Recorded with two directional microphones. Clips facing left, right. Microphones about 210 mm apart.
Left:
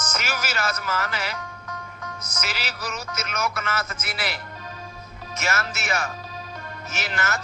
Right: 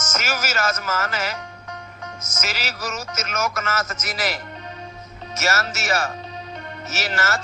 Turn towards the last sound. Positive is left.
turn(degrees=-45)  # may be behind; listen again after turning